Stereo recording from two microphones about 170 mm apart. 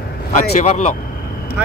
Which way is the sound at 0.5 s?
45° left (ahead or behind).